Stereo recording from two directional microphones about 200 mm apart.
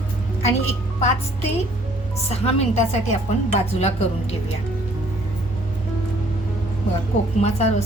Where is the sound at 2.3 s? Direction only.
30° left (ahead or behind).